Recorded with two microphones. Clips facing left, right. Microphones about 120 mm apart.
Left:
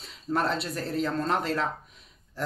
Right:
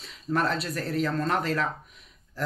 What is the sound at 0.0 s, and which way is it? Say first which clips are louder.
Speech: right 1 dB; 25° left (ahead or behind).